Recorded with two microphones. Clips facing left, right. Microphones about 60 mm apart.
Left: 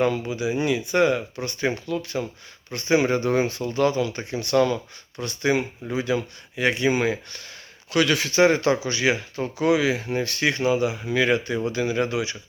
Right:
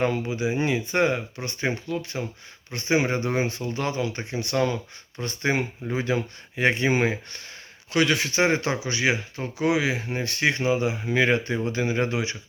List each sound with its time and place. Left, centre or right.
0.0 s speech: right
5.2 s speech: right